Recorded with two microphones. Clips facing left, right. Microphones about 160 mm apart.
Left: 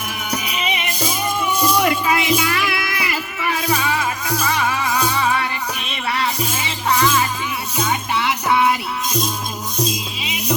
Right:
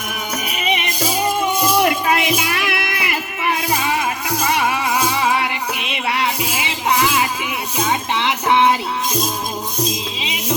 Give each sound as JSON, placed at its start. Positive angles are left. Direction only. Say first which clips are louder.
{"t": 0.4, "sound": "music", "louder": "right 2 dB", "side_deg": -40}
{"t": 1.8, "sound": "music", "louder": "right 1 dB", "side_deg": -25}
{"t": 10.2, "sound": "music", "louder": "right 2 dB", "side_deg": -20}